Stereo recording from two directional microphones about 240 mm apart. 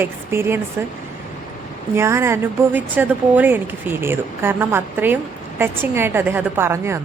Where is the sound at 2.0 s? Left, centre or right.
Centre.